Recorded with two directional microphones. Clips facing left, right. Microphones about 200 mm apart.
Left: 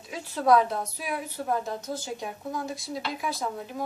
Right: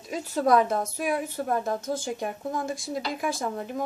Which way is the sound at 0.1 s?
45° right (ahead or behind).